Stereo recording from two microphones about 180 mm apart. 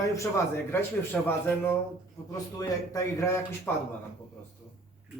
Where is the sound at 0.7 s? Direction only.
10° left (ahead or behind).